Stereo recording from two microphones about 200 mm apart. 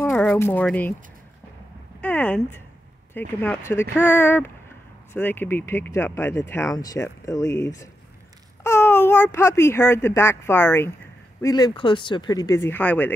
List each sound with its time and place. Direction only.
0.0 s speech: 5° left (ahead or behind)
2.0 s speech: 5° left (ahead or behind)
8.6 s speech: 10° left (ahead or behind)